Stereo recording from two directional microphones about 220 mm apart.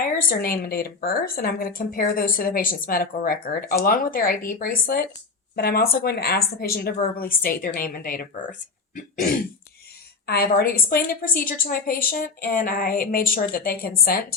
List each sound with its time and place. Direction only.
0.3 s a woman's voice: 40° left (ahead or behind)
10.2 s a woman's voice: 45° left (ahead or behind)